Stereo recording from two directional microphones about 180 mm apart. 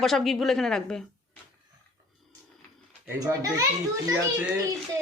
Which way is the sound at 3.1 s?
20° right (ahead or behind).